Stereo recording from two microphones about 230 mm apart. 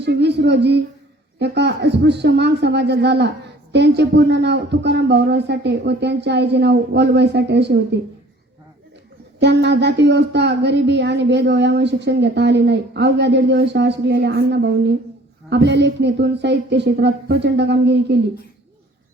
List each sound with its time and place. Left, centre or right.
0.0 s speech: right
9.4 s speech: right